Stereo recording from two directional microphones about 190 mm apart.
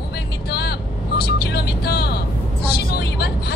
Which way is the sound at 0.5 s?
60° left (ahead or behind).